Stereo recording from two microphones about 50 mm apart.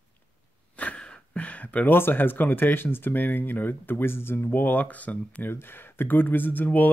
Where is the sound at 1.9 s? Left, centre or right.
Left.